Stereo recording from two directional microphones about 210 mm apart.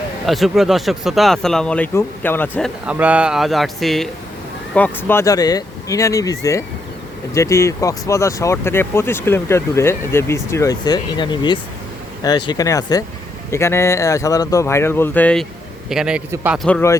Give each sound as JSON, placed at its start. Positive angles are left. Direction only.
{"t": 0.3, "sound": "speech", "side_deg": 0}
{"t": 16.6, "sound": "speech", "side_deg": 10}